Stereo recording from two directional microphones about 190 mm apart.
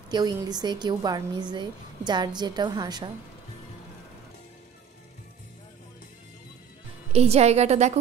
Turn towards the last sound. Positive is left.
turn(degrees=-35)  # may be behind; listen again after turning